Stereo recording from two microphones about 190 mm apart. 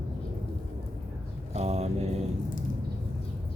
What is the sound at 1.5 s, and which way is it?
Mantra, 35° right (ahead or behind).